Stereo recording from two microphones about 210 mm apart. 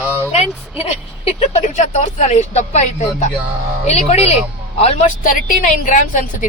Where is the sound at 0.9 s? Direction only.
30° left (ahead or behind).